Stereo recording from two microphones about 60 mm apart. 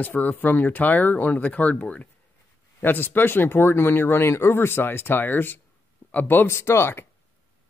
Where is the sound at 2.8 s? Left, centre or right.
Left.